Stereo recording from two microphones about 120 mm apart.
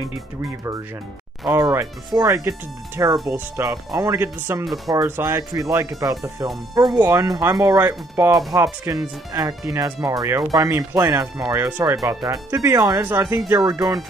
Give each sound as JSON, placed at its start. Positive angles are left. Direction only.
{"t": 1.5, "sound": "speech", "side_deg": -30}
{"t": 13.0, "sound": "speech", "side_deg": -20}
{"t": 13.5, "sound": "speech", "side_deg": -30}